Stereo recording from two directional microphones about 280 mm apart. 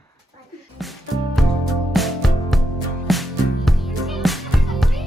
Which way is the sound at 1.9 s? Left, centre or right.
Centre.